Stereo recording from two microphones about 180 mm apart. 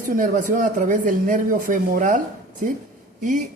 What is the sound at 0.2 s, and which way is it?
A man's voice, 45° right (ahead or behind).